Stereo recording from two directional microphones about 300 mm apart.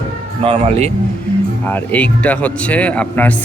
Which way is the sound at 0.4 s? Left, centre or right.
Centre.